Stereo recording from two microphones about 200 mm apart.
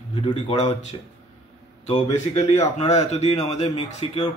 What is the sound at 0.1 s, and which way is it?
Speech, 25° left (ahead or behind).